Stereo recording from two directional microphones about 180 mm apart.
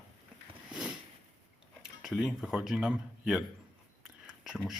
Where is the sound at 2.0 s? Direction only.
5° right (ahead or behind).